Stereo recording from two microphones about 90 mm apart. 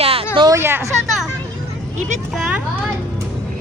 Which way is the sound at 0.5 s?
30° right (ahead or behind).